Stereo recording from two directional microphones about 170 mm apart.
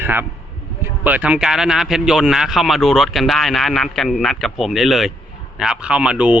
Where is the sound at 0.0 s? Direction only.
10° right (ahead or behind).